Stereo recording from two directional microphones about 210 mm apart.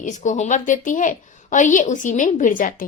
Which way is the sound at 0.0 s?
35° left (ahead or behind).